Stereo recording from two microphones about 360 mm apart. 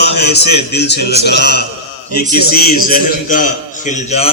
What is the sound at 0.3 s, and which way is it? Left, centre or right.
A man's voice, left.